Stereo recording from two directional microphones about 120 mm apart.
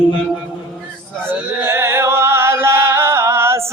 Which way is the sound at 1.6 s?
20° right (ahead or behind).